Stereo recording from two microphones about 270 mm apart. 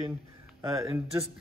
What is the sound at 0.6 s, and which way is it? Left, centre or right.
Speech, centre.